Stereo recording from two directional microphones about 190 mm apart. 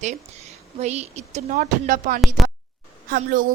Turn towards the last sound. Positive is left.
turn(degrees=-45)  # may be behind; listen again after turning